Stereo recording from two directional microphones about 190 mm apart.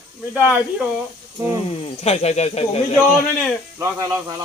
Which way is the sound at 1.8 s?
30° left (ahead or behind).